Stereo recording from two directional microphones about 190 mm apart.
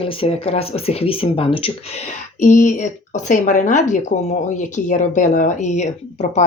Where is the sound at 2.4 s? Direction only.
40° left (ahead or behind).